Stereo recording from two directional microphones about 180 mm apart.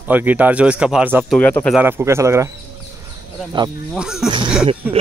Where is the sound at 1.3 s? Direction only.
10° left (ahead or behind).